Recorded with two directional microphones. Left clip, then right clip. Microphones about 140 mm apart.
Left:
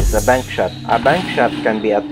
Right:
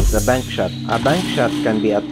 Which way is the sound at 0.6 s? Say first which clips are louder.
Left 4 dB; 30° right (ahead or behind).